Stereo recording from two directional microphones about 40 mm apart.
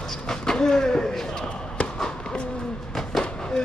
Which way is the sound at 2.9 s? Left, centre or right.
Centre.